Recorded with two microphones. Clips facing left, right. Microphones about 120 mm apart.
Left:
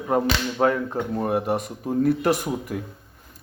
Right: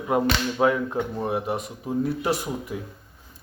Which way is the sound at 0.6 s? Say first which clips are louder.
Even; 20° left (ahead or behind).